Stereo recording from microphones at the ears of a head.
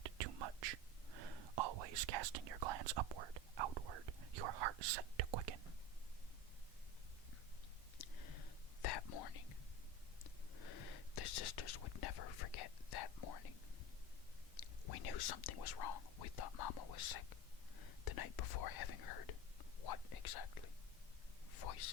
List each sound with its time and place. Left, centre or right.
0.0 s whispering: right
7.9 s whispering: left